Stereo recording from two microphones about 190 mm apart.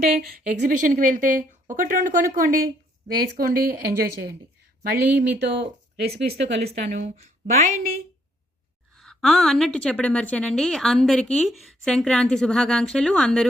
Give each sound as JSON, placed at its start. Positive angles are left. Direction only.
{"t": 0.1, "sound": "a woman's voice", "side_deg": -45}
{"t": 4.8, "sound": "speech", "side_deg": -55}
{"t": 6.7, "sound": "a woman's voice", "side_deg": -35}
{"t": 9.0, "sound": "a woman's voice", "side_deg": 0}